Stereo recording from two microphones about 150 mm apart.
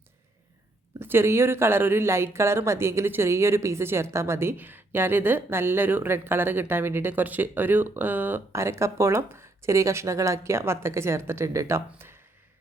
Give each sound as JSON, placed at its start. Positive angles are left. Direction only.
{"t": 0.9, "sound": "speech", "side_deg": -15}